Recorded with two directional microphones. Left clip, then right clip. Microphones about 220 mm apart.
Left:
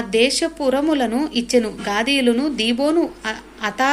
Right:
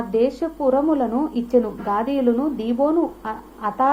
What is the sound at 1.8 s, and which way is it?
Speech, 40° left (ahead or behind).